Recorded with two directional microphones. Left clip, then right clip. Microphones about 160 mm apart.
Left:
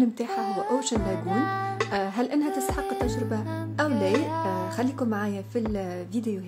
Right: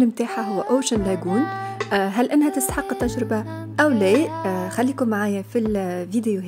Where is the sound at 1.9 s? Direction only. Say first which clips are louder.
Right 10 dB; 45° right (ahead or behind).